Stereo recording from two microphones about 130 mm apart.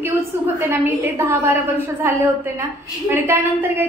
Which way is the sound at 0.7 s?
20° right (ahead or behind).